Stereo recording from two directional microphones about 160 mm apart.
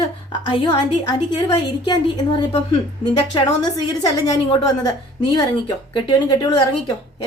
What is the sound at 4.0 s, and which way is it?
Speech, 25° left (ahead or behind).